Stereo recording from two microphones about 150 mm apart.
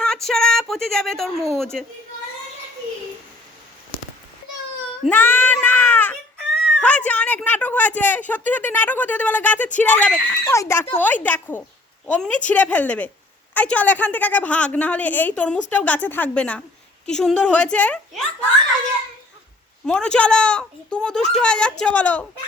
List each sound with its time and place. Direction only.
0.0 s a child's voice: 5° left (ahead or behind)
5.0 s a woman's voice: 15° left (ahead or behind)
19.8 s a woman's voice: 5° left (ahead or behind)